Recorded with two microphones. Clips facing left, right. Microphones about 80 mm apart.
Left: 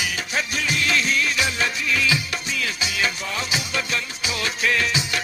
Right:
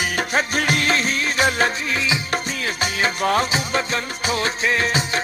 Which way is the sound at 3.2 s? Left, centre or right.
Right.